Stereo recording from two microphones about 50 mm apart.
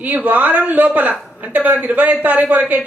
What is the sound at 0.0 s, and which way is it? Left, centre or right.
Speech, right.